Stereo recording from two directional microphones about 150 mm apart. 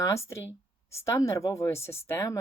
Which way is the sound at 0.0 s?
20° left (ahead or behind).